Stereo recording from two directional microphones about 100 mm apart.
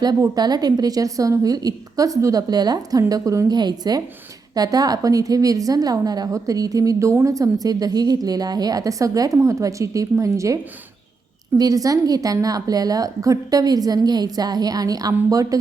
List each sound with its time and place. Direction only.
0.3 s a woman's voice: 45° right (ahead or behind)